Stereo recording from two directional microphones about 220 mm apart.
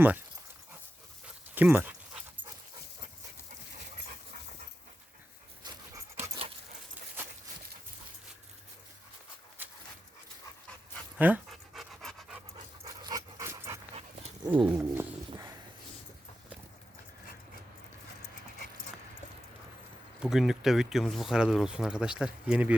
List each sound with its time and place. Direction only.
1.5 s speech: 10° right (ahead or behind)
5.6 s dog: 20° right (ahead or behind)
9.6 s dog: 10° right (ahead or behind)
11.2 s pant: 5° right (ahead or behind)
12.8 s dog: 15° right (ahead or behind)
14.4 s speech: 5° right (ahead or behind)
20.2 s speech: centre (ahead or behind)